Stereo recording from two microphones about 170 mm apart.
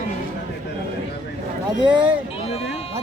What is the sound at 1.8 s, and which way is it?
Speech, 25° right (ahead or behind).